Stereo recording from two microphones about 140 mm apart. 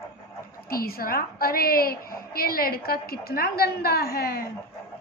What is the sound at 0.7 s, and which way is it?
A woman's voice, 90° left.